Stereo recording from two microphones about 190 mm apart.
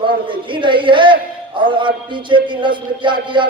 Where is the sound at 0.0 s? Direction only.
25° right (ahead or behind).